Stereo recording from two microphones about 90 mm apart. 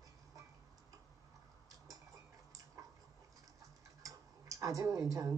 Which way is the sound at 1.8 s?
40° right (ahead or behind).